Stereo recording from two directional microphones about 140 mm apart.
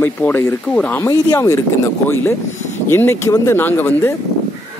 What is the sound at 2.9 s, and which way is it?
A man's voice, 15° left (ahead or behind).